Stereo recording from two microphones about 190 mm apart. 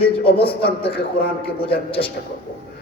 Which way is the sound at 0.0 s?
30° left (ahead or behind).